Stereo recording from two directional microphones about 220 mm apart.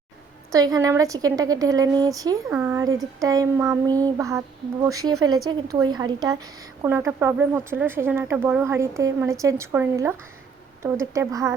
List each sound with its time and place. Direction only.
0.5 s a woman's voice: 15° right (ahead or behind)